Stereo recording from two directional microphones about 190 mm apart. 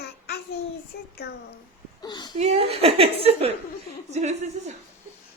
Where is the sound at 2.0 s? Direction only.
20° left (ahead or behind).